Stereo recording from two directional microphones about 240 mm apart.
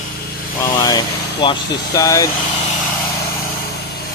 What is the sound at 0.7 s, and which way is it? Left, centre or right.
Speech, centre.